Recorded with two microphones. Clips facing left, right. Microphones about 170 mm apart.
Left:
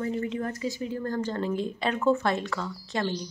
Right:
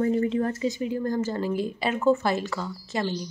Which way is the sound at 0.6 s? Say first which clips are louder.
Right 4 dB; 20° right (ahead or behind).